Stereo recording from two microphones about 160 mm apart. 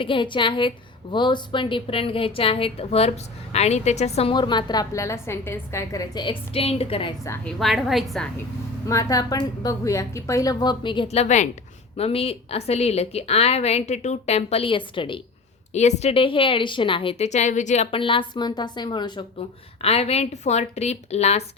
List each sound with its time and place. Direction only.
0.0 s a woman's voice: 30° left (ahead or behind)
7.4 s a woman's voice: centre (ahead or behind)
8.9 s a woman's voice: 20° left (ahead or behind)
15.7 s a woman's voice: 45° left (ahead or behind)
17.9 s a woman's voice: 35° left (ahead or behind)
19.8 s a woman's voice: 40° left (ahead or behind)